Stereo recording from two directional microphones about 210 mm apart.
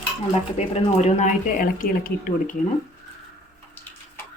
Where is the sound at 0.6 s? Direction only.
35° left (ahead or behind).